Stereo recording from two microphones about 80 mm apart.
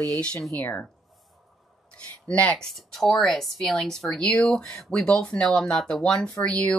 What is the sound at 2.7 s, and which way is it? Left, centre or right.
Speech, centre.